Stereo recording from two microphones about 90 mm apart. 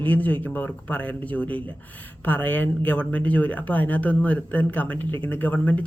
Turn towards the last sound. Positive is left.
turn(degrees=15)  # may be behind; listen again after turning